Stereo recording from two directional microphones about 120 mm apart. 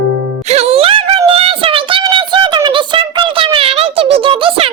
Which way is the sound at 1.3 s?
50° right (ahead or behind).